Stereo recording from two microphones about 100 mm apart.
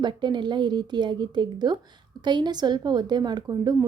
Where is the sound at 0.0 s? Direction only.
50° right (ahead or behind).